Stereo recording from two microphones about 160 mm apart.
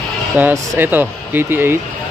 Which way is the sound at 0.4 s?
10° right (ahead or behind).